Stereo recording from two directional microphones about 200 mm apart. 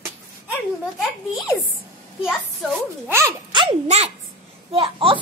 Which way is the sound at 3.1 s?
20° right (ahead or behind).